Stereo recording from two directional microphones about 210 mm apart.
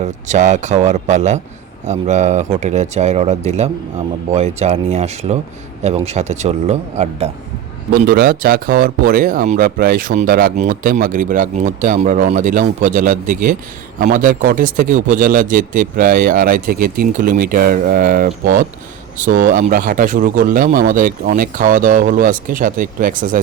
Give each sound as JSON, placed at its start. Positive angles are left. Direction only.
{"t": 0.0, "sound": "speech", "side_deg": -35}
{"t": 8.0, "sound": "speech", "side_deg": -45}